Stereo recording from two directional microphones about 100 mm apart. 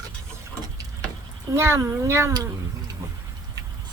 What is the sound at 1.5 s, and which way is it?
Speech, 25° right (ahead or behind).